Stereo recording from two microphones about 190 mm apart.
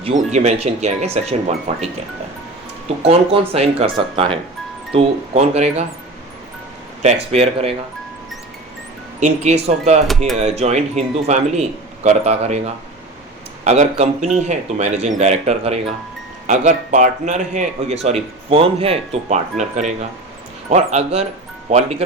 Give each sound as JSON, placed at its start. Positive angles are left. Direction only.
{"t": 0.0, "sound": "speech", "side_deg": -35}
{"t": 3.0, "sound": "speech", "side_deg": -30}
{"t": 7.0, "sound": "speech", "side_deg": -35}
{"t": 9.2, "sound": "speech", "side_deg": -35}
{"t": 13.7, "sound": "speech", "side_deg": -35}